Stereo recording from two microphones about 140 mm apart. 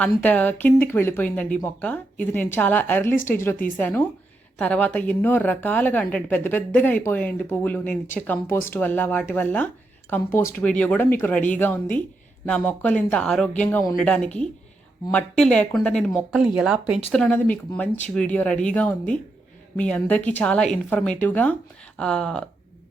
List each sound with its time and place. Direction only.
0.2 s speech: 10° left (ahead or behind)
16.6 s speech: 10° right (ahead or behind)
17.1 s speech: 5° left (ahead or behind)